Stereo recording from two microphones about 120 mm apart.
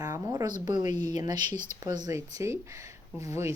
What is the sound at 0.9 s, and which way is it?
Speech, 80° left.